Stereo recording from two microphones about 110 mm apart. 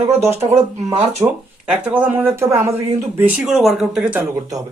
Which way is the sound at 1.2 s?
25° right (ahead or behind).